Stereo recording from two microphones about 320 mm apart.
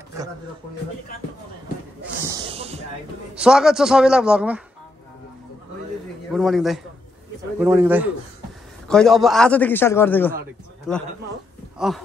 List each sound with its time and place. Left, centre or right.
2.0 s a sound: centre
3.3 s a man's voice: centre
6.3 s a man's voice: centre